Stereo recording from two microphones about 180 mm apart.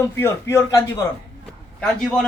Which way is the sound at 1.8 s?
5° left (ahead or behind).